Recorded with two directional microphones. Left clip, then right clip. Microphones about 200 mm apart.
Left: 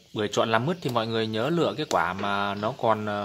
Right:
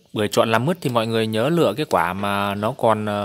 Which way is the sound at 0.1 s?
50° right (ahead or behind).